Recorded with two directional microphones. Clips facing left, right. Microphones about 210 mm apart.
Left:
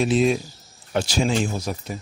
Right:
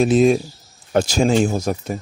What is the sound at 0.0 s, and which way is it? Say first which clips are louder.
Speech: right 5 dB; 45° right (ahead or behind).